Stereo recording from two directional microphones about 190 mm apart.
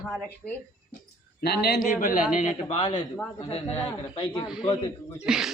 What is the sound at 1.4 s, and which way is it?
Speech, 55° left (ahead or behind).